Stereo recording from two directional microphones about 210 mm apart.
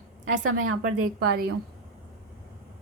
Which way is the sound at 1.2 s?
50° right (ahead or behind).